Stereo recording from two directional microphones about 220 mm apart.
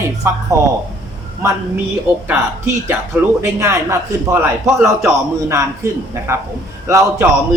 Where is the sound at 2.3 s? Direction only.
10° right (ahead or behind).